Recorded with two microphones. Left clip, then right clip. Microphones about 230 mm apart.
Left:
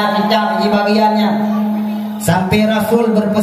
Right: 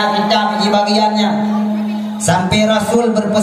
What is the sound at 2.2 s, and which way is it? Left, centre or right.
Music, right.